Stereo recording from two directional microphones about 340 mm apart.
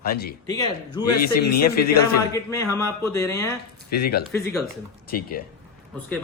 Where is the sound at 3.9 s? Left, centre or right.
Left.